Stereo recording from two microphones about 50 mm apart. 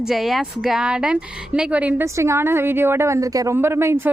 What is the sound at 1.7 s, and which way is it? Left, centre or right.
Speech, right.